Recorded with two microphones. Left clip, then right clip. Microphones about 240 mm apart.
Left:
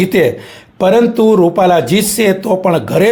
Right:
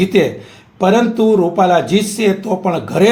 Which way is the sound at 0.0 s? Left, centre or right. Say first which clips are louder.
Left 2 dB; left.